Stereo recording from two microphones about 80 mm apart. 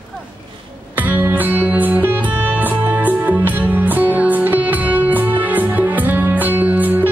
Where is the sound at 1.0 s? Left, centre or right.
Right.